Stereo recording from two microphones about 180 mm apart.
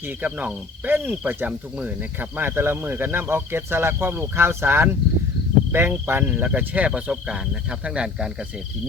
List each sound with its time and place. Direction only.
0.0 s cricket: 10° right (ahead or behind)